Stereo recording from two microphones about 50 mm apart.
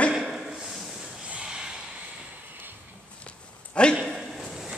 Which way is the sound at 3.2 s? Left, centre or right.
Left.